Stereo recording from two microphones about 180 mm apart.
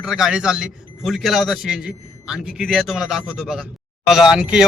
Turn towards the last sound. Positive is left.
turn(degrees=-5)  # may be behind; listen again after turning